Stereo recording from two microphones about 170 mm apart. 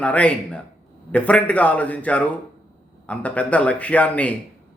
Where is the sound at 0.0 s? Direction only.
5° left (ahead or behind).